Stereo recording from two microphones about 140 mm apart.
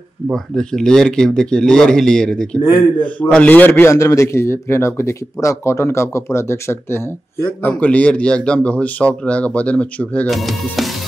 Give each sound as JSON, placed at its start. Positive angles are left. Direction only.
{"t": 0.3, "sound": "a man's voice", "side_deg": 5}
{"t": 3.9, "sound": "a man's voice", "side_deg": 25}